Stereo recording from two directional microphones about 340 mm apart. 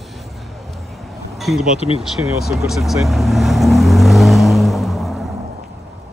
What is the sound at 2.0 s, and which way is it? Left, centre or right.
Vehicle, centre.